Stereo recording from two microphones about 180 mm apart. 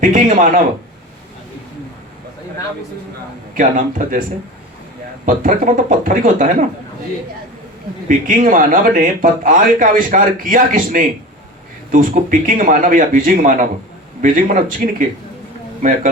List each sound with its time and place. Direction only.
0.0 s speech: 50° right (ahead or behind)
3.5 s speech: 45° right (ahead or behind)
5.2 s speech: 50° right (ahead or behind)
8.0 s speech: 45° right (ahead or behind)